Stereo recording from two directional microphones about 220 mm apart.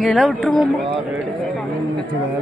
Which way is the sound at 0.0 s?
5° left (ahead or behind).